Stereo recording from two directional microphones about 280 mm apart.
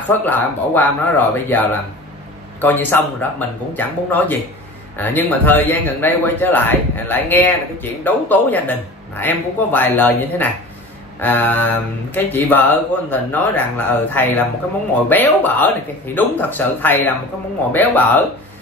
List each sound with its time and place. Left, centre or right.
0.1 s a man's voice: centre